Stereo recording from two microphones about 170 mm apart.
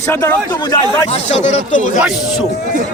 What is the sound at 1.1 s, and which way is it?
Speech, 40° left (ahead or behind).